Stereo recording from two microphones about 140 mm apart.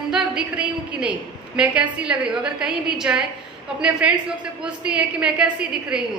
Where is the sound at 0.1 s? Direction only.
5° right (ahead or behind).